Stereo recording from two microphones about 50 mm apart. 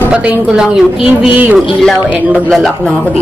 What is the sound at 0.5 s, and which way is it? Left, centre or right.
Speech, centre.